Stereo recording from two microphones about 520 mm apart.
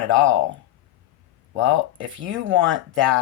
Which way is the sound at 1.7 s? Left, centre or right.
Right.